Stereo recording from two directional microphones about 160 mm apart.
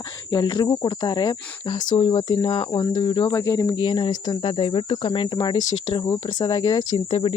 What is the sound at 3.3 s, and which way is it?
Speech, 20° left (ahead or behind).